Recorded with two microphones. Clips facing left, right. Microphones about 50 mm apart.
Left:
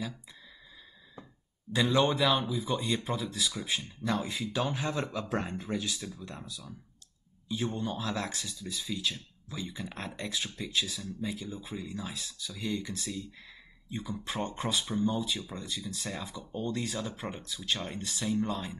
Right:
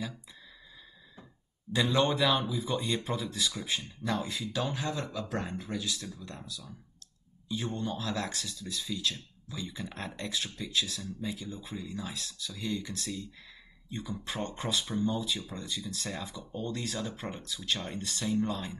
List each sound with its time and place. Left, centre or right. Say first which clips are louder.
1.7 s speech: left 1 dB; centre